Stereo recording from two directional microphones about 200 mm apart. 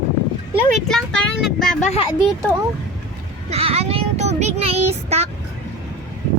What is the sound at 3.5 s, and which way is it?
Child singing, 30° right (ahead or behind).